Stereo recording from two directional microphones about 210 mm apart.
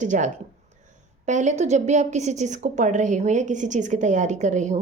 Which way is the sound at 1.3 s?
35° right (ahead or behind).